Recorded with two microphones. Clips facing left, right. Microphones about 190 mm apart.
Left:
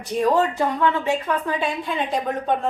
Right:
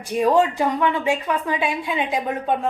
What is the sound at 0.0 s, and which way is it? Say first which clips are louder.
A woman's voice: right 2 dB; 10° right (ahead or behind).